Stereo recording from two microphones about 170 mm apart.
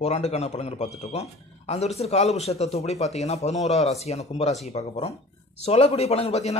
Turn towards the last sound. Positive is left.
turn(degrees=40)  # may be behind; listen again after turning